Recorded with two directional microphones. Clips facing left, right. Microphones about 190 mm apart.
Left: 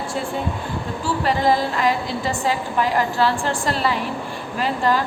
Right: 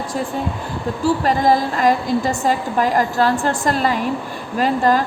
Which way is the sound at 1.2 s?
45° right (ahead or behind).